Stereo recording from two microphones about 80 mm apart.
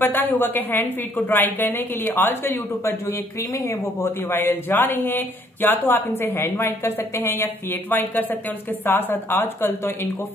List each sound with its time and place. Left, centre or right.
0.0 s speech: left